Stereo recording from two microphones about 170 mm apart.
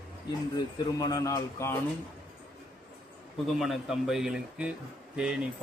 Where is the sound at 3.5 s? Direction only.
Centre (ahead or behind).